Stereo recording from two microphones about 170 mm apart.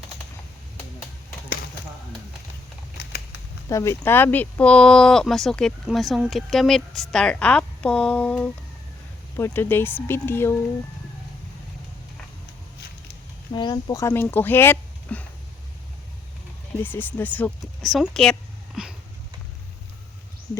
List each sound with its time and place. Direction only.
3.7 s speech: 20° left (ahead or behind)
13.5 s speech: 25° left (ahead or behind)
16.8 s speech: 10° left (ahead or behind)